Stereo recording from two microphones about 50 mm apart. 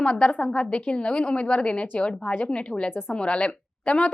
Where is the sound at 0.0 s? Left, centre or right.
Left.